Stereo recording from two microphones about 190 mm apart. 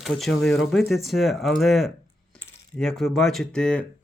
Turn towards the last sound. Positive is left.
turn(degrees=5)  # may be behind; listen again after turning